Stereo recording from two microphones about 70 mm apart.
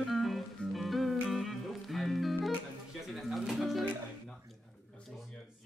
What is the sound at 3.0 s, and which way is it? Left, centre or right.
Pigeon, centre.